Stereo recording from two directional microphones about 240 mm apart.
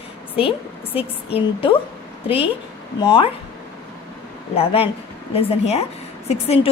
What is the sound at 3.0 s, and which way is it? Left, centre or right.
Speech, centre.